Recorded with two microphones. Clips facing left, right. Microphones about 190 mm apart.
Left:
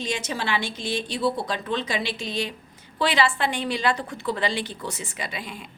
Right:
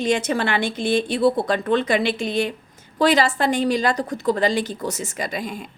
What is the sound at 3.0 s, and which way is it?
A woman's voice, 45° right (ahead or behind).